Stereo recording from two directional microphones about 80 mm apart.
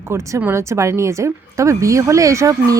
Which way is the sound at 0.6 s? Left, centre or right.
Right.